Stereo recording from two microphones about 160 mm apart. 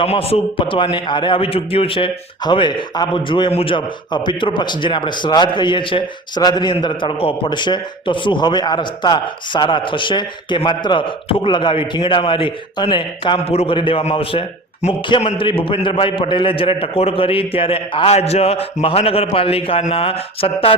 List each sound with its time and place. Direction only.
0.0 s a man's voice: 40° left (ahead or behind)